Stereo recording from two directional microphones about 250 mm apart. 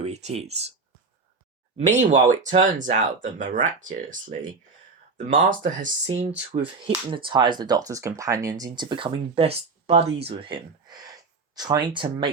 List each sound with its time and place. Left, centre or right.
0.0 s speech: right
1.8 s speech: right